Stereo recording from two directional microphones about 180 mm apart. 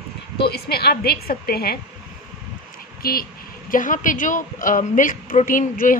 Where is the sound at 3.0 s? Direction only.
55° left (ahead or behind).